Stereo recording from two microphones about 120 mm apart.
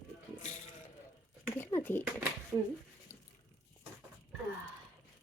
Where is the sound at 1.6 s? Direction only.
20° left (ahead or behind).